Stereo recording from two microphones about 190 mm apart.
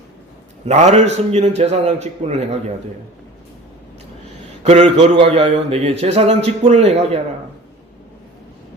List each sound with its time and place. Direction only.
0.6 s a man's voice: 35° right (ahead or behind)
4.6 s a man's voice: 35° right (ahead or behind)